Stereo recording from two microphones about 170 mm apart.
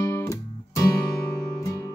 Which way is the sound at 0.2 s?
20° left (ahead or behind).